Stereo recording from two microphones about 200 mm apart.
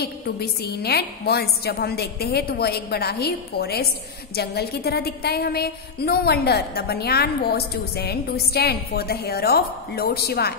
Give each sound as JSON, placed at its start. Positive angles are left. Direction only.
{"t": 0.0, "sound": "a woman's voice", "side_deg": 55}